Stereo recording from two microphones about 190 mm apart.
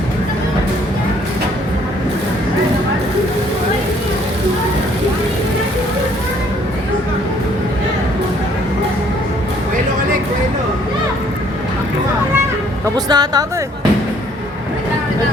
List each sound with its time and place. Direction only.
13.1 s speech: 20° right (ahead or behind)